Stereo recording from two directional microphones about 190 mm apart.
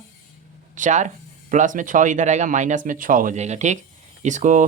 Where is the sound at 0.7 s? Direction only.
40° right (ahead or behind).